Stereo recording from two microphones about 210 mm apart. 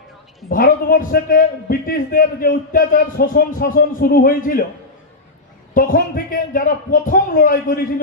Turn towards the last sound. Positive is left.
turn(degrees=45)  # may be behind; listen again after turning